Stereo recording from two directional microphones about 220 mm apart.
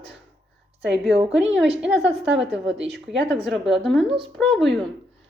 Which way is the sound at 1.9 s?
55° right (ahead or behind).